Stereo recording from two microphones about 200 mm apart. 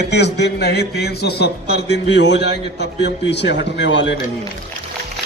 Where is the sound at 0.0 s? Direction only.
60° left (ahead or behind).